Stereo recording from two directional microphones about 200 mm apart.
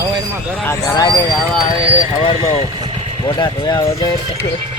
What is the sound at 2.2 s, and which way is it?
Speech, 30° left (ahead or behind).